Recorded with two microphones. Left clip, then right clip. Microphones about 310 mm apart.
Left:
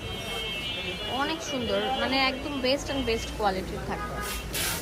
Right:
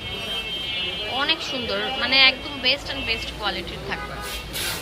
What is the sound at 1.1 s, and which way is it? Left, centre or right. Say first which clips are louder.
A woman's voice: right 7 dB; centre.